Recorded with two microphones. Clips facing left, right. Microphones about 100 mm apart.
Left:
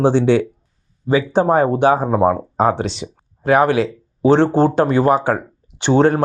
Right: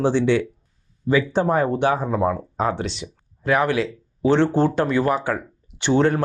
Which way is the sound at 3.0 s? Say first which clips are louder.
Left 5 dB; 25° left (ahead or behind).